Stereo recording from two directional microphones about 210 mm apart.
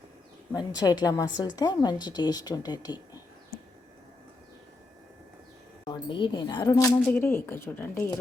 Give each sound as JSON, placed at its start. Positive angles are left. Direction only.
{"t": 0.5, "sound": "a woman's voice", "side_deg": 20}
{"t": 5.8, "sound": "a woman's voice", "side_deg": 20}